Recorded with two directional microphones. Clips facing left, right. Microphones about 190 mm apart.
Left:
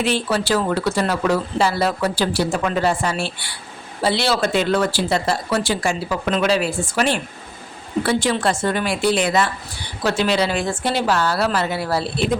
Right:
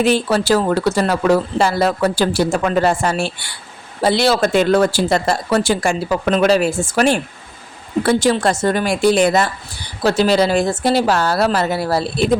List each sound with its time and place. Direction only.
0.0 s speech: 40° right (ahead or behind)